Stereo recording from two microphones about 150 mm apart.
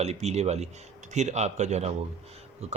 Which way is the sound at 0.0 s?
45° right (ahead or behind).